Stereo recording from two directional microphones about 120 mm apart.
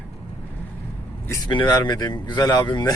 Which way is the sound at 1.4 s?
40° left (ahead or behind).